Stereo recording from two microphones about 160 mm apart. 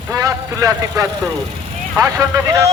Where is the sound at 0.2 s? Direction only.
20° right (ahead or behind).